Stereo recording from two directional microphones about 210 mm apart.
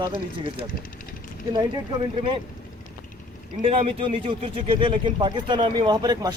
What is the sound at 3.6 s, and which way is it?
Speech, 30° right (ahead or behind).